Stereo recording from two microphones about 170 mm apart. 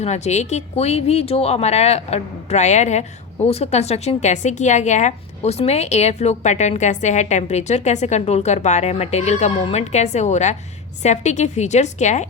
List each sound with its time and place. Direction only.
0.0 s a woman's voice: 40° left (ahead or behind)